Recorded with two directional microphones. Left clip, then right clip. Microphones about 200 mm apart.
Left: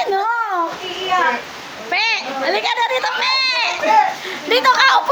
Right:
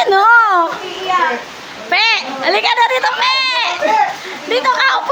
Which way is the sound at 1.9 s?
15° right (ahead or behind).